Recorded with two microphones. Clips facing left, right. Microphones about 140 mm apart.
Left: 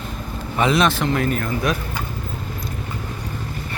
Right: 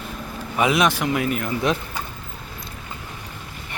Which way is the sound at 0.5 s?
10° right (ahead or behind).